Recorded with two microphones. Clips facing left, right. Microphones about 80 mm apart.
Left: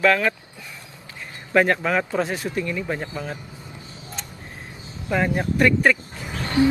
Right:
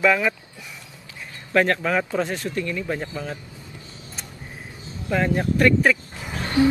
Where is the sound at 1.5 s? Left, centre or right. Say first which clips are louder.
Left 1 dB; centre.